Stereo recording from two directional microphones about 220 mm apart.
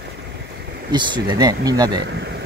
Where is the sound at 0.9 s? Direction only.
20° right (ahead or behind).